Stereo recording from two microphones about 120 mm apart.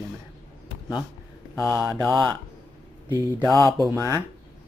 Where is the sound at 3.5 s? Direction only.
25° left (ahead or behind).